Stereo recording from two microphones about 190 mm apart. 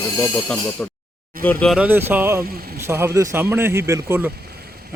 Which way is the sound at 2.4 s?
50° right (ahead or behind).